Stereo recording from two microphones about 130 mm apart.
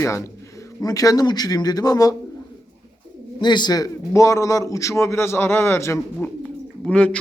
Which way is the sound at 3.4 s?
35° left (ahead or behind).